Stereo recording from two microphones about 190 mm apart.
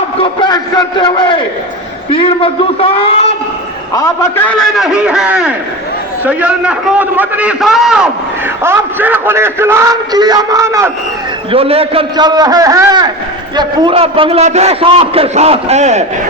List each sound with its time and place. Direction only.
0.2 s a man's voice: 25° left (ahead or behind)
3.9 s a man's voice: 15° left (ahead or behind); by 10.9 s 15° right (ahead or behind)
11.5 s a man's voice: 30° right (ahead or behind)